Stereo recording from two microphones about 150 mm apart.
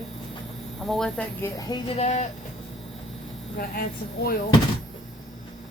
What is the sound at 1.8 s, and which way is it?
Speech, 45° left (ahead or behind).